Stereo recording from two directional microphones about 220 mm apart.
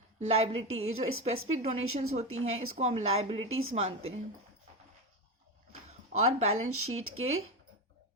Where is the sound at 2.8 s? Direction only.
30° right (ahead or behind).